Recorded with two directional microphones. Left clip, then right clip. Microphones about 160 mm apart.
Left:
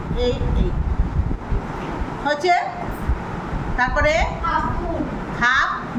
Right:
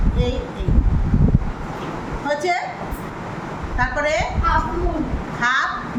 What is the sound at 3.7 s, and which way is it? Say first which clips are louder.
Speech: left 2 dB; 20° left (ahead or behind).